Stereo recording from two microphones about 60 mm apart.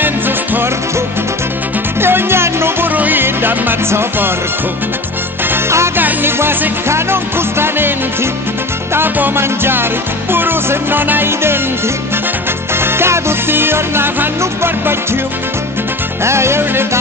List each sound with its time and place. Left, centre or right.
2.0 s music: right
5.9 s music: right
12.7 s music: right
16.3 s music: right